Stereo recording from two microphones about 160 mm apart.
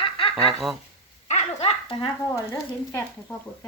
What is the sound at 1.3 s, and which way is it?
Dog, 45° left (ahead or behind).